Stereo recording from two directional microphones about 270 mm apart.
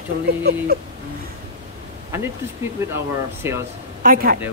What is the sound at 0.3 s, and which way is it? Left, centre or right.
Speech, right.